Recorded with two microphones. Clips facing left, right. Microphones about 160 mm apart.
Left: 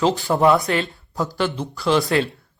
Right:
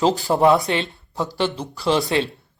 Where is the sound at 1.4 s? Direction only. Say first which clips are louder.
Right 1 dB; 30° right (ahead or behind).